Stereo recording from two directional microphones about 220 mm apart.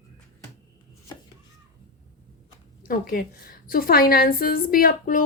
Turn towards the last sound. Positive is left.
turn(degrees=40)  # may be behind; listen again after turning